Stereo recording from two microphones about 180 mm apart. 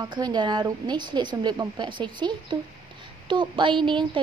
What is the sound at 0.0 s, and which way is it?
A woman's voice, 25° right (ahead or behind).